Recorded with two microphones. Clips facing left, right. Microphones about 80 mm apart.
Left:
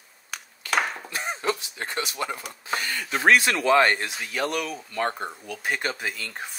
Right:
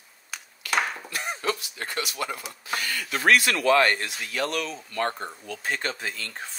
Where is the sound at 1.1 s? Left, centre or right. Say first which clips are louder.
Left 1 dB; left.